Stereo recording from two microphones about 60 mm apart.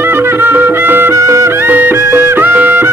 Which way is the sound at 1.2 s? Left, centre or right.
Right.